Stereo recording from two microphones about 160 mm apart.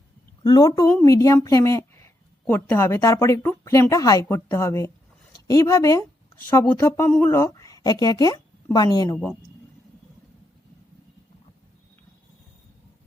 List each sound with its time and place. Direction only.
0.4 s a woman's voice: 25° left (ahead or behind)